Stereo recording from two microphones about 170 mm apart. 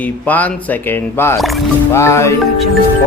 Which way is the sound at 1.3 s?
Centre (ahead or behind).